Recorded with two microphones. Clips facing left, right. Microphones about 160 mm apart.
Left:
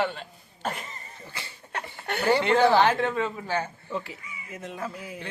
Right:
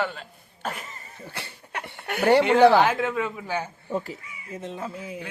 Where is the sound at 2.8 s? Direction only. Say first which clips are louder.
Even; 5° right (ahead or behind).